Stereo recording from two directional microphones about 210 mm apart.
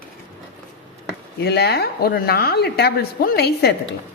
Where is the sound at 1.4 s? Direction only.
50° left (ahead or behind).